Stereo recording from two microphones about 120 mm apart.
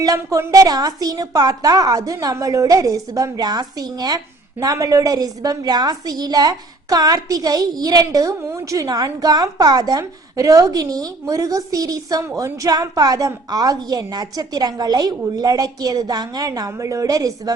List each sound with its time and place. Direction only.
0.0 s a woman's voice: 30° right (ahead or behind)